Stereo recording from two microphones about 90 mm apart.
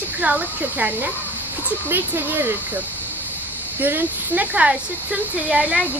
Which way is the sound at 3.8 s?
20° right (ahead or behind).